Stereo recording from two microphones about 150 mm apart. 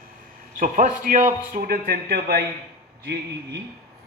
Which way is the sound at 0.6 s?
65° right (ahead or behind).